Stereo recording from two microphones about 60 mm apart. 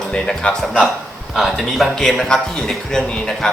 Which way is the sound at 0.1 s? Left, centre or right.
Centre.